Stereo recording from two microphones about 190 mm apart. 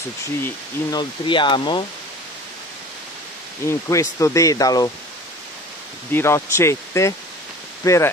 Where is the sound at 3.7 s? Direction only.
15° left (ahead or behind).